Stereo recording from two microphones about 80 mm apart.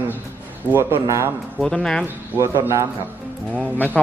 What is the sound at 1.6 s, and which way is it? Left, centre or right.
Speech, centre.